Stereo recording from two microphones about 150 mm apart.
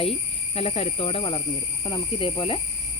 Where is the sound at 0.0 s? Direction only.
40° left (ahead or behind).